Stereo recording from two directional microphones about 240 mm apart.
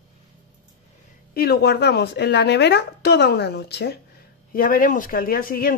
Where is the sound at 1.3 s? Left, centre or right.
Left.